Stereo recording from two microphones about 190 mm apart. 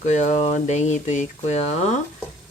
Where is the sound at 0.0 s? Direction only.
40° left (ahead or behind).